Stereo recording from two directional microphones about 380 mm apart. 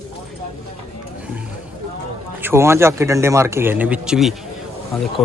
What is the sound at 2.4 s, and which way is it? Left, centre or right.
A man's voice, centre.